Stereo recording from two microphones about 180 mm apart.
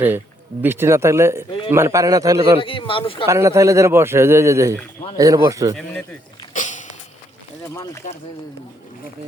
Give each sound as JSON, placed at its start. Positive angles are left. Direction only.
{"t": 0.6, "sound": "speech", "side_deg": -15}
{"t": 2.6, "sound": "speech", "side_deg": 30}
{"t": 3.2, "sound": "speech", "side_deg": -15}
{"t": 5.7, "sound": "speech", "side_deg": 10}
{"t": 6.5, "sound": "a sound", "side_deg": 45}
{"t": 8.0, "sound": "speech", "side_deg": 40}